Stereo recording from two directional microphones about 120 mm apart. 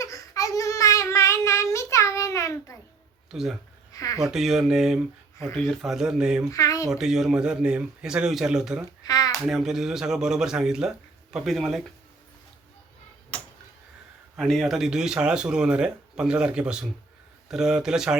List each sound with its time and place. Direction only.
0.0 s child singing: 30° left (ahead or behind)
3.3 s speech: 5° right (ahead or behind)
3.9 s speech: 30° left (ahead or behind)
4.2 s speech: 5° right (ahead or behind)
6.5 s speech: 25° left (ahead or behind)
6.9 s speech: 5° right (ahead or behind)
9.0 s a sound: 30° left (ahead or behind)
9.5 s speech: 5° right (ahead or behind)
14.3 s speech: centre (ahead or behind)